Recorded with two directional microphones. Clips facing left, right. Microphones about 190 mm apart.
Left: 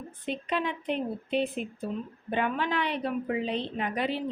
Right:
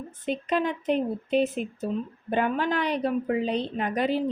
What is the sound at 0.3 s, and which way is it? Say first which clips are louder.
A woman's voice: right 5 dB; 45° right (ahead or behind).